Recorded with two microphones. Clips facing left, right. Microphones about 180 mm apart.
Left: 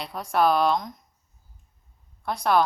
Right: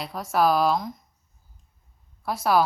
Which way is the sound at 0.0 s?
Centre (ahead or behind).